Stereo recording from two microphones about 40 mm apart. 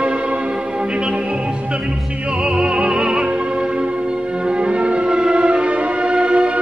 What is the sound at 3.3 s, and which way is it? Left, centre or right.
Music, right.